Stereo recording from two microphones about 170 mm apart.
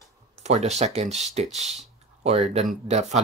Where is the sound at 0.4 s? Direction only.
40° right (ahead or behind).